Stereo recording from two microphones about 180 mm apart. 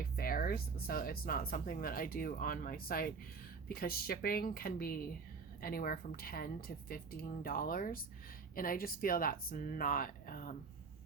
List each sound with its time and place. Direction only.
0.2 s a woman's voice: 55° left (ahead or behind)